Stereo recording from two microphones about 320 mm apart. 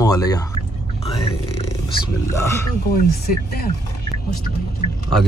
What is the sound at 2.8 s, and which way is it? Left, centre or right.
Speech, left.